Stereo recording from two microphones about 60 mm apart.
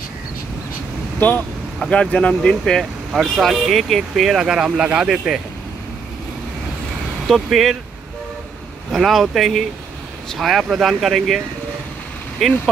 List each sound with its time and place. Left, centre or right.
1.2 s speech: left
1.9 s speech: left
2.8 s speech: centre
7.3 s speech: centre
8.9 s speech: centre